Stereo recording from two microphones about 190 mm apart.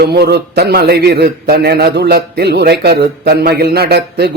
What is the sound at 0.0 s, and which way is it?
Mantra, 60° right (ahead or behind).